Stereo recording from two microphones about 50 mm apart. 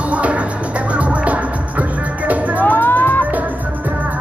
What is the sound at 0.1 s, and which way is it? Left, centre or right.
Music, right.